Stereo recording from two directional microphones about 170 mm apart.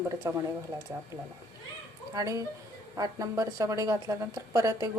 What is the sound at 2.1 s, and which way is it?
A woman's voice, 20° right (ahead or behind).